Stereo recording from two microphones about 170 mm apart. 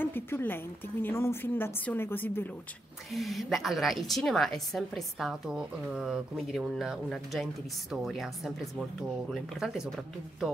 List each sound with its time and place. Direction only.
0.0 s a woman's voice: 10° left (ahead or behind)
3.1 s a woman's voice: centre (ahead or behind)